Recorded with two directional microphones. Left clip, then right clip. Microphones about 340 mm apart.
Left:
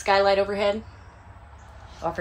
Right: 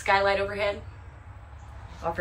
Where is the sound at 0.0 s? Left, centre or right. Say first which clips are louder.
Left 3 dB; centre.